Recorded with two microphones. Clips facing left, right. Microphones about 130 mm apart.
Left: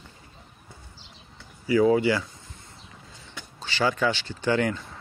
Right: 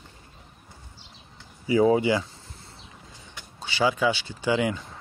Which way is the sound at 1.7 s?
20° right (ahead or behind).